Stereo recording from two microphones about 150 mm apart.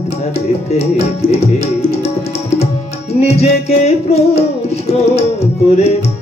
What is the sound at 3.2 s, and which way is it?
Music, 45° left (ahead or behind).